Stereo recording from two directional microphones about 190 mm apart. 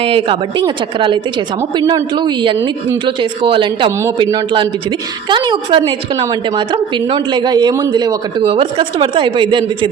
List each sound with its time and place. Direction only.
0.0 s a woman's voice: 30° right (ahead or behind)